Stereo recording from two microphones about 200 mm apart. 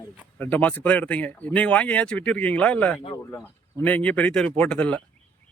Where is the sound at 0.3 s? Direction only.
10° left (ahead or behind).